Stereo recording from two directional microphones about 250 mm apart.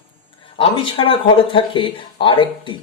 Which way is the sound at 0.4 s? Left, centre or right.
Left.